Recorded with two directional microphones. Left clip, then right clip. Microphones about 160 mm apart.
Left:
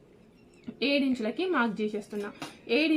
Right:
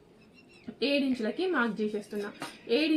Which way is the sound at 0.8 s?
20° left (ahead or behind).